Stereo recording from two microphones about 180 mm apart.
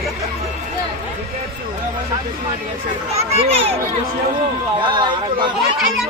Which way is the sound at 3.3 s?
35° right (ahead or behind).